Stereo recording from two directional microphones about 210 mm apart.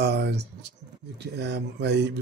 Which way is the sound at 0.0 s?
55° right (ahead or behind).